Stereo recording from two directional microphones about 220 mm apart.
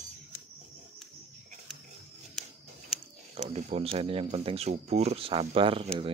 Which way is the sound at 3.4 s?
25° right (ahead or behind).